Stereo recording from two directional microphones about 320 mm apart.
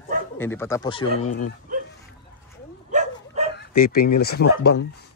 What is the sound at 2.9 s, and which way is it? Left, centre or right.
Bow-wow, right.